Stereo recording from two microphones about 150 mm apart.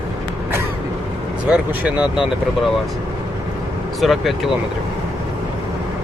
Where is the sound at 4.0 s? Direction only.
Centre (ahead or behind).